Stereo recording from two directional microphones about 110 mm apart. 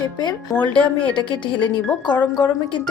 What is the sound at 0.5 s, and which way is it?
Speech, 15° left (ahead or behind).